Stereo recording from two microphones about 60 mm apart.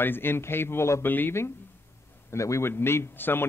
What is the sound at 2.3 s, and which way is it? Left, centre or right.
A man's voice, left.